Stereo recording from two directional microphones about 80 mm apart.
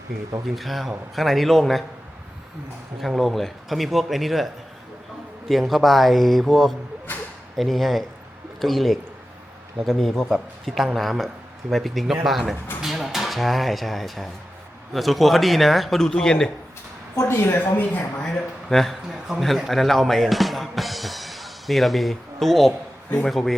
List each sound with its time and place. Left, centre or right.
0.4 s a man's voice: centre
3.0 s a man's voice: centre
5.5 s a man's voice: centre
17.2 s a woman's voice: left
18.2 s a man's voice: centre